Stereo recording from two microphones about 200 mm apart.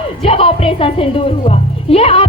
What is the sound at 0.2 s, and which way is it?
Music, 30° left (ahead or behind).